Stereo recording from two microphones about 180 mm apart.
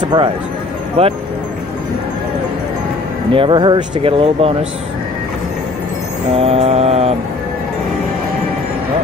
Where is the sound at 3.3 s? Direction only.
30° right (ahead or behind).